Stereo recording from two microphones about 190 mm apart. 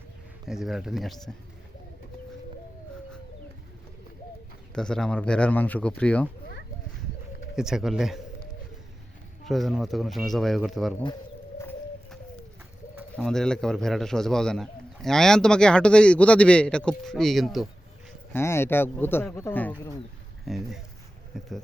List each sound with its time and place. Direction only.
0.4 s a man's voice: centre (ahead or behind)
4.7 s a man's voice: 5° left (ahead or behind)
7.5 s a man's voice: 5° right (ahead or behind)
9.4 s a man's voice: centre (ahead or behind)
11.0 s bird: 20° left (ahead or behind)
13.1 s a man's voice: centre (ahead or behind)
18.3 s speech: 15° left (ahead or behind)
20.4 s a man's voice: centre (ahead or behind)